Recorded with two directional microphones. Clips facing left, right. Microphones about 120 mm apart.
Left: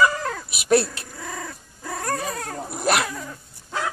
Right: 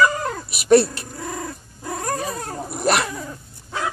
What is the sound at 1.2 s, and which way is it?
Dog, 25° right (ahead or behind).